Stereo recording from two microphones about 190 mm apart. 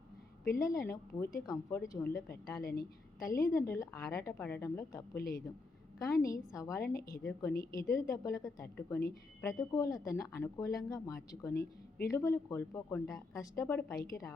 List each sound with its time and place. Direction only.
0.4 s a woman's voice: 15° left (ahead or behind)
5.1 s a man's voice: 50° left (ahead or behind)
6.0 s a woman's voice: 15° left (ahead or behind)